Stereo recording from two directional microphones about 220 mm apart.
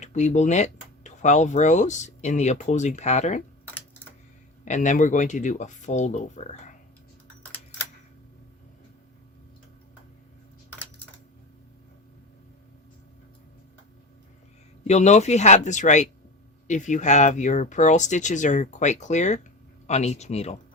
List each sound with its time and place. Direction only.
0.0 s speech: 35° left (ahead or behind)
4.6 s speech: 35° left (ahead or behind)
14.8 s speech: 30° left (ahead or behind)